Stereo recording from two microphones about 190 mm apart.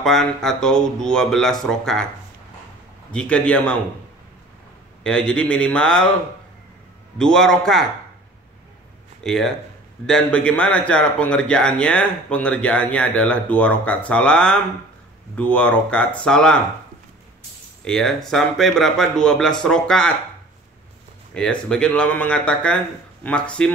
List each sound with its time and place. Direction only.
0.0 s a man's voice: centre (ahead or behind)
3.1 s a man's voice: 5° left (ahead or behind)
5.0 s a man's voice: 5° left (ahead or behind)
7.2 s a man's voice: 5° left (ahead or behind)
9.2 s a man's voice: centre (ahead or behind)
17.8 s a man's voice: centre (ahead or behind)
21.3 s a man's voice: 5° left (ahead or behind)